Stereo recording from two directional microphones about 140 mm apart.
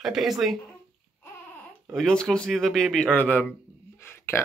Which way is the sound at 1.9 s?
5° left (ahead or behind).